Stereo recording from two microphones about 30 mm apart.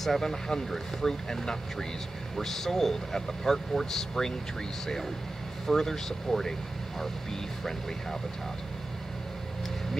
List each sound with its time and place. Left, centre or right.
0.0 s speech: centre
5.7 s speech: centre